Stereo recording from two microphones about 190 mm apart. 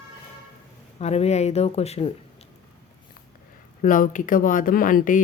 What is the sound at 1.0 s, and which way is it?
Speech, 35° left (ahead or behind).